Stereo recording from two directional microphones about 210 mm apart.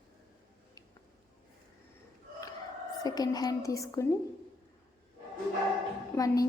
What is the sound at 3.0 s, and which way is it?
A woman's voice, 20° left (ahead or behind).